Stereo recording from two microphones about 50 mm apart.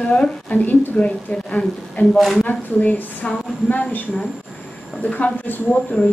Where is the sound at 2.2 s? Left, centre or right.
Centre.